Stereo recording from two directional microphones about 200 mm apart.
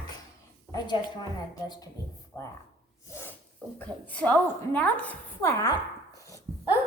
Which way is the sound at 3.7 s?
5° left (ahead or behind).